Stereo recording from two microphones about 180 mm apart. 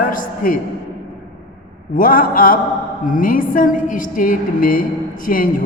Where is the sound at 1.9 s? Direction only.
50° left (ahead or behind).